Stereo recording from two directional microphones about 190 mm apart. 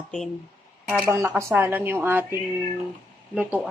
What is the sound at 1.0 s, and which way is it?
Speech, 15° right (ahead or behind).